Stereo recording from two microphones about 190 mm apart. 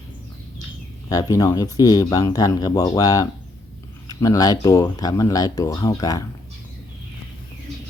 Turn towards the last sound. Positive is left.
turn(degrees=20)  # may be behind; listen again after turning